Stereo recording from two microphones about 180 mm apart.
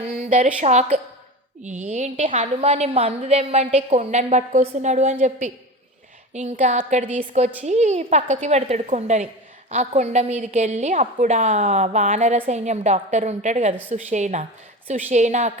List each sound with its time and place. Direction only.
0.3 s a woman's voice: 45° right (ahead or behind)
6.3 s a woman's voice: 40° right (ahead or behind)